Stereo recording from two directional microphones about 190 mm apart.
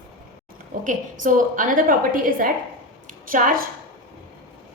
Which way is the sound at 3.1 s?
45° right (ahead or behind).